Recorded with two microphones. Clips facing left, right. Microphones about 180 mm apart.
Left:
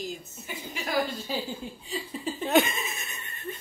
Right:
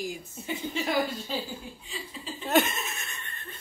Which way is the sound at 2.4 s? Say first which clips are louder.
Left 1 dB; centre (ahead or behind).